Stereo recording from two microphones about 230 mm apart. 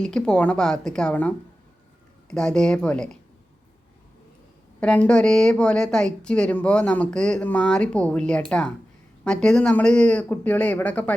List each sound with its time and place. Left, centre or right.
0.0 s a woman's voice: centre
2.3 s a woman's voice: centre
4.8 s a woman's voice: centre